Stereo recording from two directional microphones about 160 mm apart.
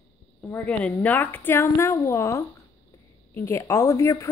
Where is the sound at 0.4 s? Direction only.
10° left (ahead or behind).